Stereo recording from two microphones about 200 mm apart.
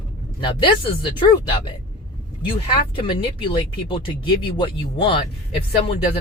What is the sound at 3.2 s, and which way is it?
Speech, 25° left (ahead or behind).